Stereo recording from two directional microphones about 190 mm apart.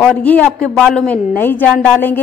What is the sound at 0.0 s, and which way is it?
A woman's voice, 5° left (ahead or behind).